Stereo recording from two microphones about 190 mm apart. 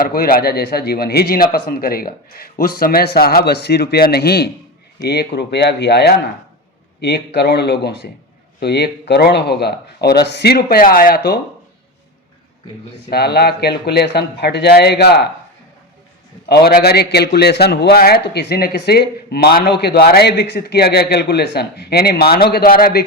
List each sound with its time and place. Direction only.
0.0 s a man's voice: 50° left (ahead or behind)
13.1 s a man's voice: 55° left (ahead or behind)
16.5 s a man's voice: 55° left (ahead or behind)